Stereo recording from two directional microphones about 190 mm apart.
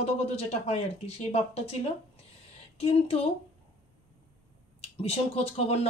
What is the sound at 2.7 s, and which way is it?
Speech, 30° left (ahead or behind).